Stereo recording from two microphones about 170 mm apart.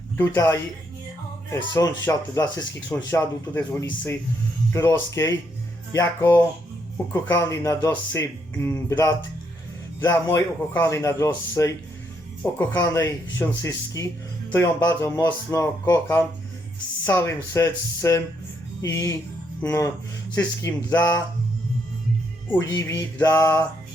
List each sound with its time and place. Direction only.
0.2 s speech: 15° left (ahead or behind)
1.7 s speech: 15° left (ahead or behind)
22.5 s speech: 15° left (ahead or behind)